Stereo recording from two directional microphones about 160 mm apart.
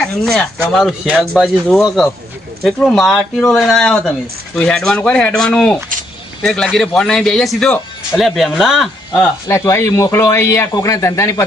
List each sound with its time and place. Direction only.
0.0 s speech: 5° left (ahead or behind)
9.5 s a man's voice: 15° left (ahead or behind)